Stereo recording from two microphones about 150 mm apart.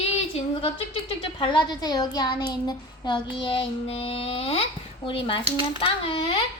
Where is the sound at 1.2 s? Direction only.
30° left (ahead or behind).